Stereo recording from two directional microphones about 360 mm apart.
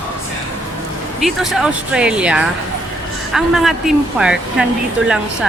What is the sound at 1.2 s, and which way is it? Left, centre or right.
Speech, centre.